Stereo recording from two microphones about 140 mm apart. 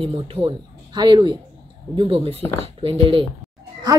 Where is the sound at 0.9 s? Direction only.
30° right (ahead or behind).